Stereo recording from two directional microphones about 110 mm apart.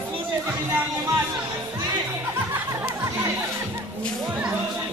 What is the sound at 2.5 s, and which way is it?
Music, 25° right (ahead or behind).